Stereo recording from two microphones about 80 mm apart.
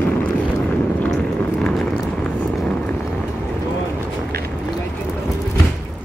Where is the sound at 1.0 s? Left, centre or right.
Centre.